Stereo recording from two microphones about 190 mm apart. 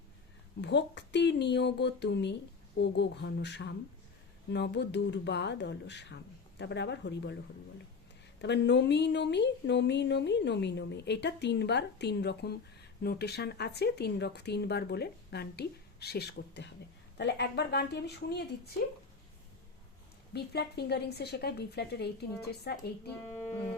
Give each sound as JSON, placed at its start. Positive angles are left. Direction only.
{"t": 0.6, "sound": "speech", "side_deg": 65}
{"t": 8.4, "sound": "speech", "side_deg": 65}
{"t": 20.3, "sound": "speech", "side_deg": 60}